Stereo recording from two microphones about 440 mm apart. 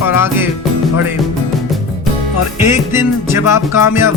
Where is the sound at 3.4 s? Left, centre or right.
Left.